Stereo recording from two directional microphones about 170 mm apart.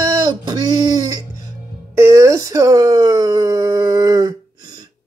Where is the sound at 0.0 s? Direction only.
20° right (ahead or behind).